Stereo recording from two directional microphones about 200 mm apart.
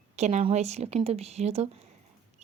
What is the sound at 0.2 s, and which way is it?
A woman's voice, 35° right (ahead or behind).